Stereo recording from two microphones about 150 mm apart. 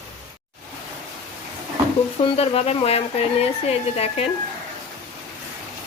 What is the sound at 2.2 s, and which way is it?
Speech, 40° left (ahead or behind).